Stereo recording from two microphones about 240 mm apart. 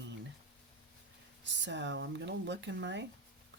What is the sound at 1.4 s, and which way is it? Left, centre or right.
Speech, right.